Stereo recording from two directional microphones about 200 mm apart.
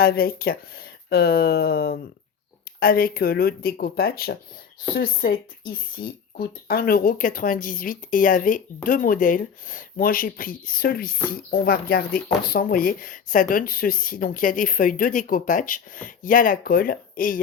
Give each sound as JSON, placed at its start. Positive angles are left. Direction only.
{"t": 0.0, "sound": "speech", "side_deg": 50}